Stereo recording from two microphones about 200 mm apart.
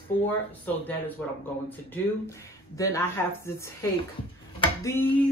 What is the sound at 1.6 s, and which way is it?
Speech, 10° left (ahead or behind).